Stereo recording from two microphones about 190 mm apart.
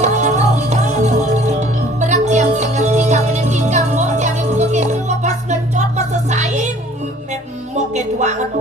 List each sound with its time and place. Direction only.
0.0 s music: 40° right (ahead or behind)
7.7 s music: 35° right (ahead or behind)